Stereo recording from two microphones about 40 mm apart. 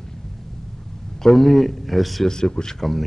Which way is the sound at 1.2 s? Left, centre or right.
Centre.